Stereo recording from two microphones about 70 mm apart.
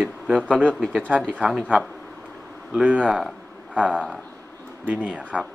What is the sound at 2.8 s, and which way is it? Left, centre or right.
Speech, right.